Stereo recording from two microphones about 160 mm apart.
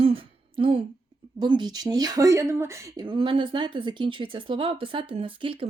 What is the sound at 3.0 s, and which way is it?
Speech, 30° right (ahead or behind).